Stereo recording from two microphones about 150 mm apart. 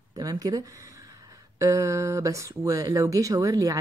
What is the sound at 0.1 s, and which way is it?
Speech, 25° right (ahead or behind).